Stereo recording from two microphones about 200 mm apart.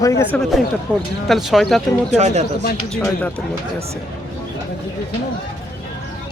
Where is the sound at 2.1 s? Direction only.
35° right (ahead or behind).